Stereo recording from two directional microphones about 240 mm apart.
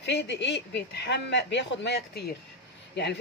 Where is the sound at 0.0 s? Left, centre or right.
Left.